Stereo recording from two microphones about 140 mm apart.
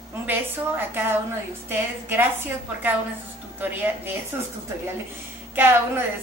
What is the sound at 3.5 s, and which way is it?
Speech, 15° right (ahead or behind).